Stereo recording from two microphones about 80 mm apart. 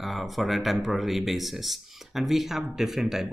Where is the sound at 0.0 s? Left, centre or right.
Centre.